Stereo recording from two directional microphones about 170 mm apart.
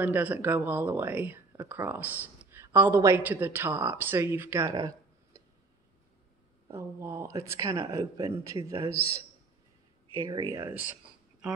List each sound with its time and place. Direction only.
0.0 s speech: 10° right (ahead or behind)
6.7 s speech: 15° right (ahead or behind)
10.2 s speech: 20° right (ahead or behind)